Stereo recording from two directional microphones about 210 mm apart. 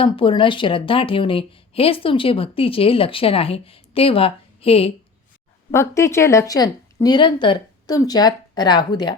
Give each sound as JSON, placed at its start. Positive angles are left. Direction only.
{"t": 0.0, "sound": "a woman's voice", "side_deg": 25}
{"t": 5.7, "sound": "a woman's voice", "side_deg": 15}